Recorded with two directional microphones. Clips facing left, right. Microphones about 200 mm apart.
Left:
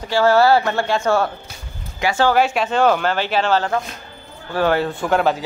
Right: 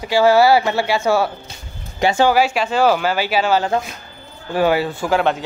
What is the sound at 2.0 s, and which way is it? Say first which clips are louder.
Speech: right 3 dB; 20° right (ahead or behind).